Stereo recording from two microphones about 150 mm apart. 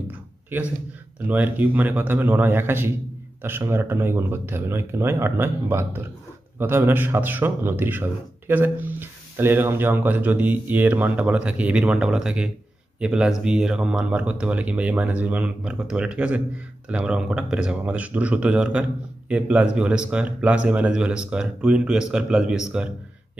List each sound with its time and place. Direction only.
0.5 s speech: 10° right (ahead or behind)